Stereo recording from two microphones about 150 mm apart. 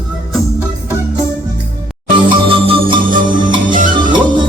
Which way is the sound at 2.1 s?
35° right (ahead or behind).